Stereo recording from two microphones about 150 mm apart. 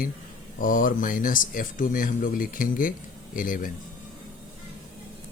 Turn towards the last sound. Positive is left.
turn(degrees=65)  # may be behind; listen again after turning